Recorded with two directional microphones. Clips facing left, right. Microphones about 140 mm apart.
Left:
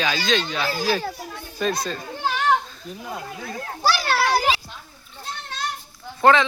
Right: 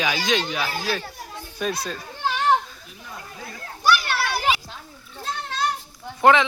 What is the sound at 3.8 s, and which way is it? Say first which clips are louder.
Children playing: left 1 dB; 35° left (ahead or behind).